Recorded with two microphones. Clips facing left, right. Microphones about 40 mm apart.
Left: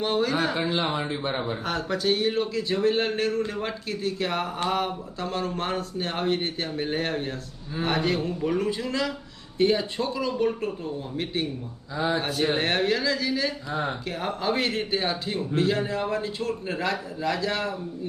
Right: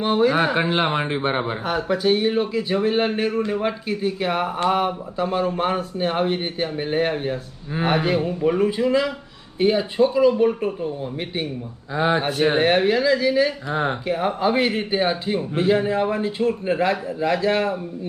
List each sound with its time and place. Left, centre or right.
0.0 s a man's voice: centre
0.5 s speech: right
1.6 s speech: centre
11.9 s speech: right
12.5 s a man's voice: centre